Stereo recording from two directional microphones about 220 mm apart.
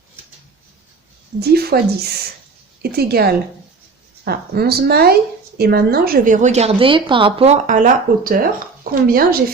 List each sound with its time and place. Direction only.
1.4 s a woman's voice: 45° right (ahead or behind)